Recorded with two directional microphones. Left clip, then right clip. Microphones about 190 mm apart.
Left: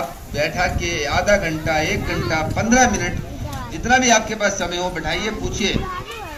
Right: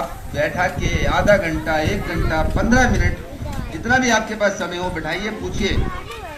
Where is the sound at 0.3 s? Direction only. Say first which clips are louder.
Right 1 dB; 35° left (ahead or behind).